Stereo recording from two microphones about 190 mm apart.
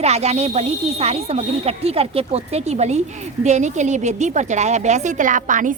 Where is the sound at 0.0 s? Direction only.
35° right (ahead or behind).